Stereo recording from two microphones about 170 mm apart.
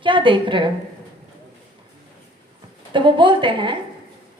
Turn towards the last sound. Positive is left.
turn(degrees=-30)  # may be behind; listen again after turning